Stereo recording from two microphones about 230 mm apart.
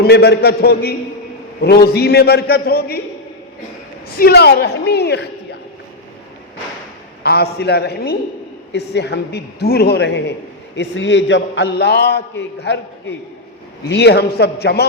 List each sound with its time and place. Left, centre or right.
0.0 s a man's voice: left
4.2 s a man's voice: left
7.2 s a man's voice: left